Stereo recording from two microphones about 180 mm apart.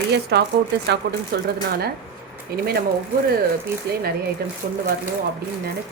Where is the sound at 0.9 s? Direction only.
60° right (ahead or behind).